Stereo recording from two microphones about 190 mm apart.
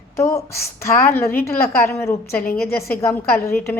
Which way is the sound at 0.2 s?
15° left (ahead or behind).